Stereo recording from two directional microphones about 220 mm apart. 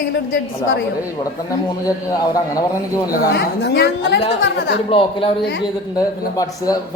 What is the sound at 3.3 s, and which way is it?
A woman's voice, 50° left (ahead or behind).